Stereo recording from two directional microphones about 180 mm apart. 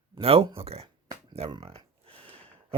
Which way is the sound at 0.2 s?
35° right (ahead or behind).